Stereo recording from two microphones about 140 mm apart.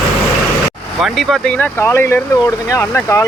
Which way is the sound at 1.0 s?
Centre (ahead or behind).